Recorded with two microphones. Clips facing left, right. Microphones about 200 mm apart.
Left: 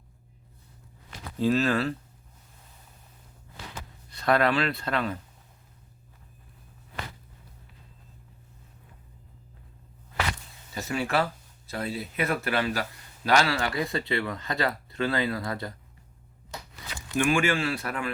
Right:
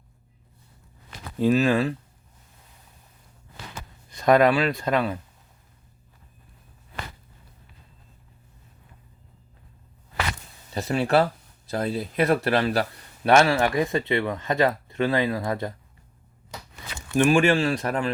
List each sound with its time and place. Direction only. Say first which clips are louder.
1.4 s speech: right 4 dB; 15° right (ahead or behind)
4.1 s speech: right 6 dB; 15° right (ahead or behind)
10.8 s speech: right 6 dB; 35° right (ahead or behind); by 15.7 s 20° right (ahead or behind)
17.2 s speech: right 6 dB; 35° right (ahead or behind)